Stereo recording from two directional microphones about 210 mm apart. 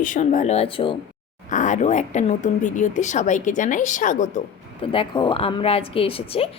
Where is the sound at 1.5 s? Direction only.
35° left (ahead or behind).